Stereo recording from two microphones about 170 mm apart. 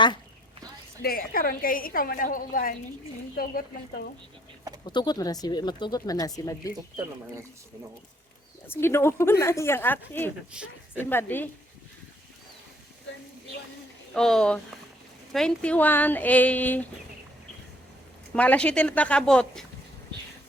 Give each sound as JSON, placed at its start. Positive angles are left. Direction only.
{"t": 1.0, "sound": "a woman's voice", "side_deg": 60}
{"t": 4.9, "sound": "speech", "side_deg": 25}
{"t": 8.6, "sound": "a woman's voice", "side_deg": 15}
{"t": 10.5, "sound": "speech", "side_deg": -5}
{"t": 11.0, "sound": "a woman's voice", "side_deg": 15}
{"t": 14.1, "sound": "a woman's voice", "side_deg": 5}
{"t": 18.3, "sound": "a woman's voice", "side_deg": 5}